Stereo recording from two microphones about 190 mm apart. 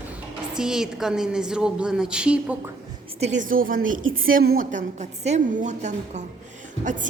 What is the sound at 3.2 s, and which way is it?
A woman's voice, 40° right (ahead or behind).